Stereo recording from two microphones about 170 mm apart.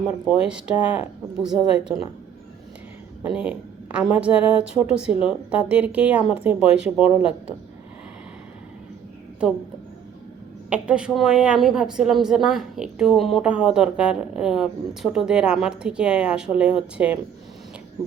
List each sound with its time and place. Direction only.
0.0 s a woman's voice: 5° right (ahead or behind)
3.3 s a woman's voice: 5° right (ahead or behind)
7.0 s speech: 35° left (ahead or behind)
10.7 s a woman's voice: 5° right (ahead or behind)